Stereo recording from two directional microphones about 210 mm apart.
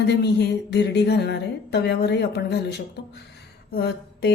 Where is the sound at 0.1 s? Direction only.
55° left (ahead or behind).